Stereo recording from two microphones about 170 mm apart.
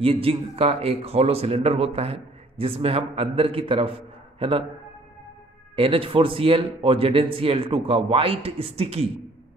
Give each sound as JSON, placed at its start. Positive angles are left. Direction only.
{"t": 0.0, "sound": "a man's voice", "side_deg": -35}
{"t": 5.8, "sound": "speech", "side_deg": -30}